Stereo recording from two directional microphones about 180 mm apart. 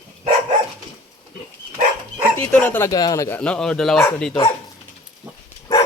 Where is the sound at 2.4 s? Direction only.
10° left (ahead or behind).